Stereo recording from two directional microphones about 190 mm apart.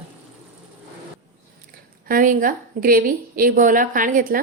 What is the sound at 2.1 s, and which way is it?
A woman's voice, 45° right (ahead or behind).